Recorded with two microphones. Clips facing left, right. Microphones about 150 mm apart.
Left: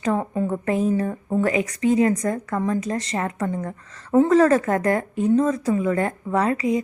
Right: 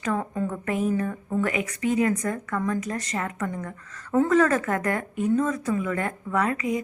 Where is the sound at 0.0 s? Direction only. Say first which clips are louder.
Left 4 dB; 25° left (ahead or behind).